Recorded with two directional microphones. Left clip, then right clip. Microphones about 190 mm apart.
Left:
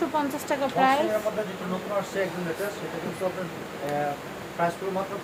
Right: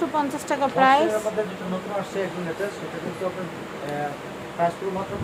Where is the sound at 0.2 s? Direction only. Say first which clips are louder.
Right 3 dB; 10° right (ahead or behind).